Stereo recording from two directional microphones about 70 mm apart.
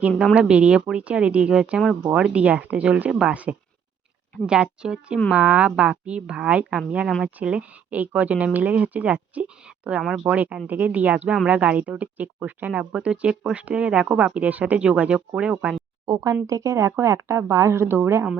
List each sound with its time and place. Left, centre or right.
0.3 s speech: centre
16.0 s speech: right